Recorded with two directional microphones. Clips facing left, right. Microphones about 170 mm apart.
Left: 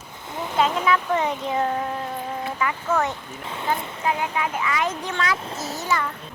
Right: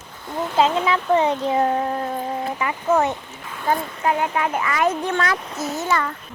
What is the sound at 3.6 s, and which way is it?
Speech, 55° right (ahead or behind).